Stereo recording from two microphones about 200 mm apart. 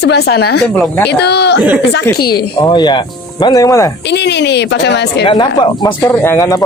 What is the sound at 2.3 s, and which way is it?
Speech, 20° left (ahead or behind).